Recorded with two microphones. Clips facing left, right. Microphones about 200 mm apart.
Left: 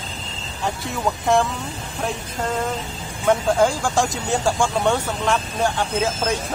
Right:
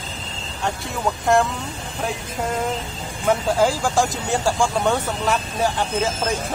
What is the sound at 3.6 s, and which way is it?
Speech, 5° right (ahead or behind).